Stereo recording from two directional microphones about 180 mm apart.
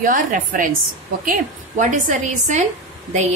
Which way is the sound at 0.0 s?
50° right (ahead or behind).